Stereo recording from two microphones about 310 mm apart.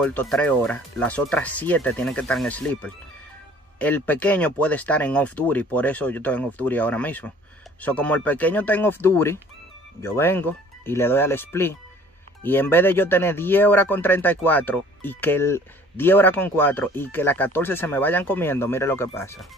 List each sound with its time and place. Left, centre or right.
0.0 s speech: centre